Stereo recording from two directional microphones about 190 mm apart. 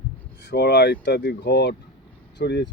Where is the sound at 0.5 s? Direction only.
60° left (ahead or behind).